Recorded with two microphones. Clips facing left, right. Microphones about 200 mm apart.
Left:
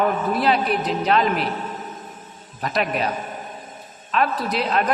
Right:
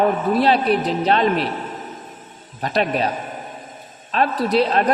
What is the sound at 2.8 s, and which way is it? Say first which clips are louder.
Speech: right 3 dB; 30° right (ahead or behind).